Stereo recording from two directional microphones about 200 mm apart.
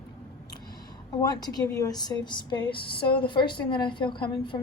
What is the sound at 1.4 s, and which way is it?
A woman's voice, 20° left (ahead or behind).